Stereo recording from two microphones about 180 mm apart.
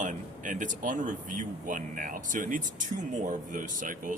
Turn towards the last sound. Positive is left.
turn(degrees=-50)  # may be behind; listen again after turning